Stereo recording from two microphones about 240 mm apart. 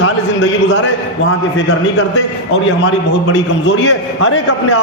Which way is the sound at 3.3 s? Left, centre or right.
Left.